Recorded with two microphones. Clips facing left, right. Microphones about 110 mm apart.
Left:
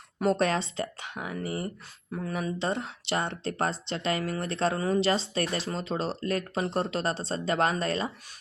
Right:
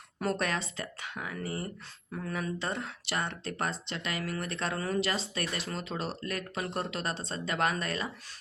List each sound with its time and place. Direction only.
0.2 s speech: 25° left (ahead or behind)